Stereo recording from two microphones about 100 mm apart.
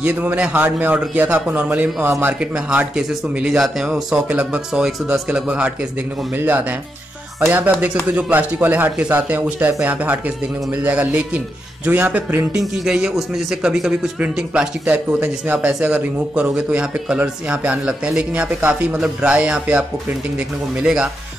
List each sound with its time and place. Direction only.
0.0 s a man's voice: 15° right (ahead or behind)